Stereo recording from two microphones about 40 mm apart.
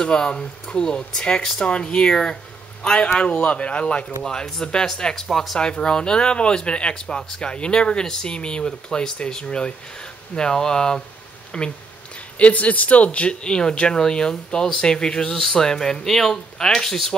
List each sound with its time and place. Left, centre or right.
0.0 s speech: centre
4.2 s speech: centre
12.4 s speech: left; by 17.2 s centre